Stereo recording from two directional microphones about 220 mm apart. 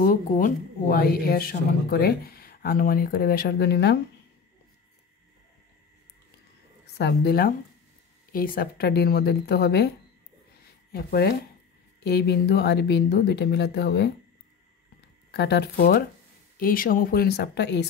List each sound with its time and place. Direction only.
0.0 s speech: 40° left (ahead or behind)
7.0 s speech: 50° left (ahead or behind)
15.3 s speech: 50° left (ahead or behind)